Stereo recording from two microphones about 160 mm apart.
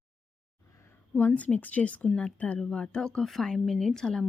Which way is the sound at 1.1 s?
10° left (ahead or behind).